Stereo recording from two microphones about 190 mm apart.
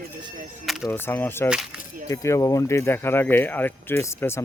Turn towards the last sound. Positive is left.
turn(degrees=15)  # may be behind; listen again after turning